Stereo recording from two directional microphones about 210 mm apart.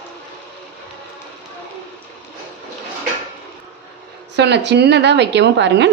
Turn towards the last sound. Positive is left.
turn(degrees=-55)  # may be behind; listen again after turning